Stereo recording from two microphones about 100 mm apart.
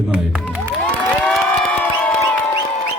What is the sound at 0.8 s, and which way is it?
Crowd, 15° left (ahead or behind).